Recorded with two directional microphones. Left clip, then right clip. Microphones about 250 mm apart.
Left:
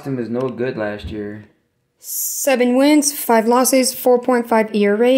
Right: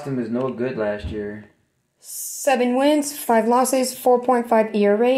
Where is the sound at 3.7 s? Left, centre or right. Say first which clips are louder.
Left 3 dB; left.